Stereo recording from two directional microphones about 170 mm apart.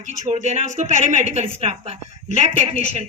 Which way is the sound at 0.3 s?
45° right (ahead or behind).